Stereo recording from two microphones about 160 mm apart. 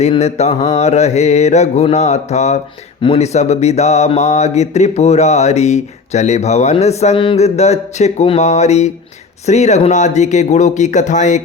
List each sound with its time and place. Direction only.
0.0 s speech: 40° left (ahead or behind)